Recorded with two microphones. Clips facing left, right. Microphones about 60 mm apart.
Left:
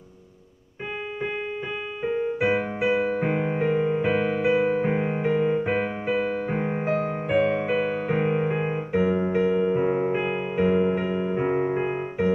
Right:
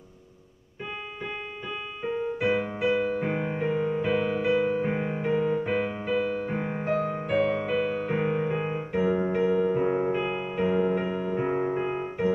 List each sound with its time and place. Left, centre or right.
2.0 s music: centre